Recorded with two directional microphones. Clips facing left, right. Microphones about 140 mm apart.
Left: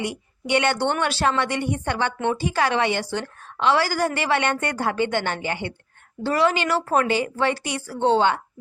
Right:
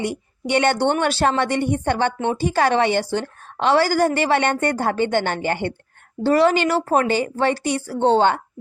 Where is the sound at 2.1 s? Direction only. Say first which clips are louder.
Right 1 dB; 25° right (ahead or behind).